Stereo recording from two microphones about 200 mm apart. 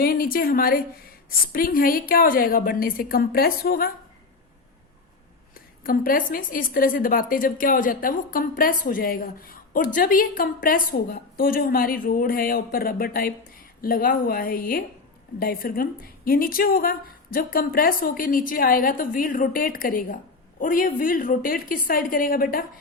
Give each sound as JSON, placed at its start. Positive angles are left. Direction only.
{"t": 0.0, "sound": "a woman's voice", "side_deg": 45}
{"t": 5.5, "sound": "a woman's voice", "side_deg": 45}